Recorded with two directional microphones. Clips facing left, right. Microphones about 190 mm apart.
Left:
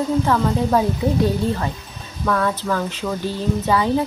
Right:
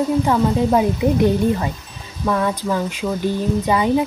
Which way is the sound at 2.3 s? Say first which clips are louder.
Right 1 dB; 15° right (ahead or behind).